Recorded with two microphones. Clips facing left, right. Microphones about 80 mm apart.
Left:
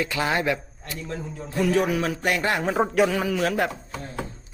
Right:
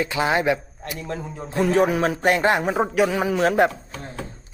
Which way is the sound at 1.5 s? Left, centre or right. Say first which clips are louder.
Right 3 dB; right.